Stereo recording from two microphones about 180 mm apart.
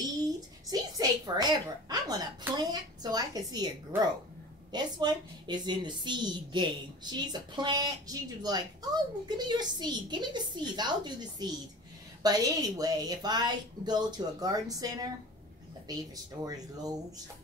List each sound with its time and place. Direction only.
0.7 s a woman's voice: 20° right (ahead or behind)